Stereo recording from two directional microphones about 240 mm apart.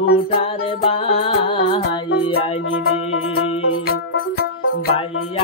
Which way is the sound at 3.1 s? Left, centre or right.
Left.